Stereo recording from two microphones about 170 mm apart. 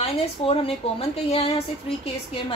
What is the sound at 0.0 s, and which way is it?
A woman's voice, 35° left (ahead or behind).